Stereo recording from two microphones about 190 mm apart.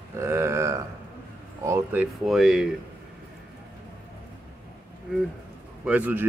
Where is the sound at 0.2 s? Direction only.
15° right (ahead or behind).